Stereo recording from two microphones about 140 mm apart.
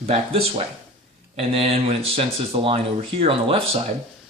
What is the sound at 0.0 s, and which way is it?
Speech, 45° right (ahead or behind).